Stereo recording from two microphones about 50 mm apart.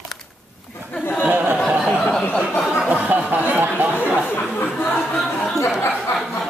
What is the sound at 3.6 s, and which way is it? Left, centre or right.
Chatter, right.